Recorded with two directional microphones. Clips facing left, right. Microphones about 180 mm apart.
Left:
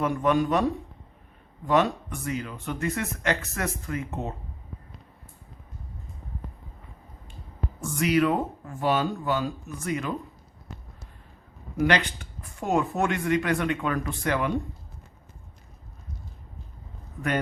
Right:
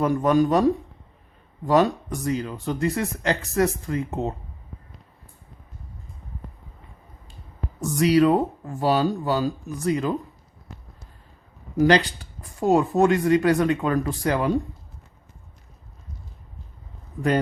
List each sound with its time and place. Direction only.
0.0 s speech: 40° right (ahead or behind)
1.6 s speech: 35° right (ahead or behind)
7.8 s speech: 40° right (ahead or behind)
11.8 s speech: 35° right (ahead or behind)